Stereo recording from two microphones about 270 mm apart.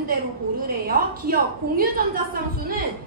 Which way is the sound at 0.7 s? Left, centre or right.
Right.